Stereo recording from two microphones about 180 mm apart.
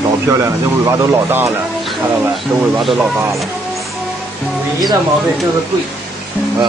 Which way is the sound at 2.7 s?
Centre (ahead or behind).